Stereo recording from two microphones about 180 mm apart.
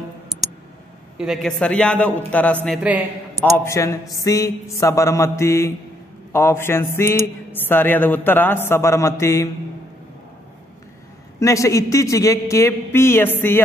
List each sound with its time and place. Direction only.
1.1 s a man's voice: 5° right (ahead or behind)
3.5 s speech: 15° left (ahead or behind)
11.3 s speech: 15° left (ahead or behind)